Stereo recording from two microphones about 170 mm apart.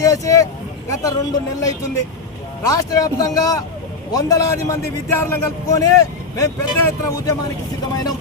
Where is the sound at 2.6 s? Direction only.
20° left (ahead or behind).